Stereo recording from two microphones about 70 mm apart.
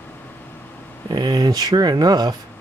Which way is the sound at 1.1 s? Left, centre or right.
Right.